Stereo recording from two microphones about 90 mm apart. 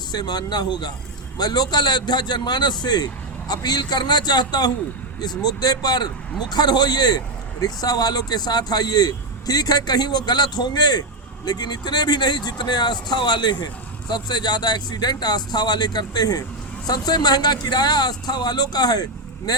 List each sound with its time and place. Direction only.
0.1 s speech: 50° left (ahead or behind)